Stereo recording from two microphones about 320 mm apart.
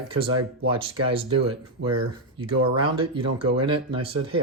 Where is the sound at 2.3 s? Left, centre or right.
Centre.